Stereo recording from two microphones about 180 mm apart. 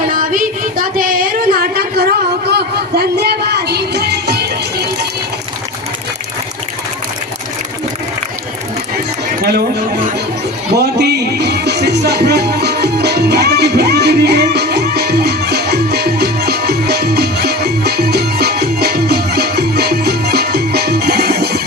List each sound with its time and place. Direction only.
0.1 s music: 50° right (ahead or behind); by 5.0 s 65° right (ahead or behind)
10.8 s music: 65° right (ahead or behind)